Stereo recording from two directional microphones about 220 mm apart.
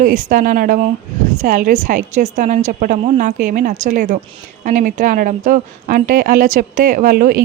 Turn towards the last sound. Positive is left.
turn(degrees=-40)  # may be behind; listen again after turning